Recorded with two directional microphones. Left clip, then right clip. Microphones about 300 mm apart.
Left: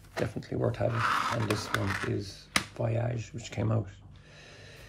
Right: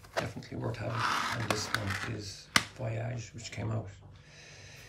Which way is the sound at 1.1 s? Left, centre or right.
Centre.